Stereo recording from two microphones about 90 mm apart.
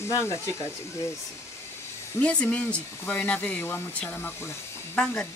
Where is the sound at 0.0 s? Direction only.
30° left (ahead or behind).